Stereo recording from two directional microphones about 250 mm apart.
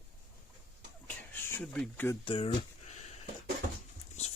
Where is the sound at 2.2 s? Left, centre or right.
Left.